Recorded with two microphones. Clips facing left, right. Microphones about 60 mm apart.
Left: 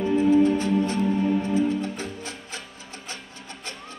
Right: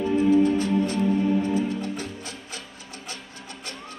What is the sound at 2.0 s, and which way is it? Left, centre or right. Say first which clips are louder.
Music: left 1 dB; left.